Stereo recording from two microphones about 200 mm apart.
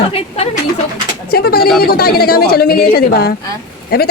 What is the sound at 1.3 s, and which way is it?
A man's voice, 50° left (ahead or behind).